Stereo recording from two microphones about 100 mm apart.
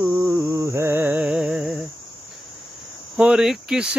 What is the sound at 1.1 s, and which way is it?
Music, 10° right (ahead or behind).